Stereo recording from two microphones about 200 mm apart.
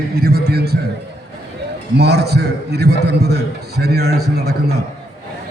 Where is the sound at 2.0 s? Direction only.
55° right (ahead or behind).